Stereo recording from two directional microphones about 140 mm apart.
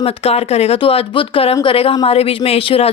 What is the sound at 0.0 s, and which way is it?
A woman's voice, 45° left (ahead or behind).